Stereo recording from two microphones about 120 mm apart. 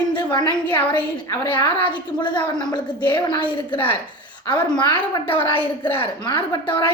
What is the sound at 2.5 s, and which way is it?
Speech, 35° left (ahead or behind).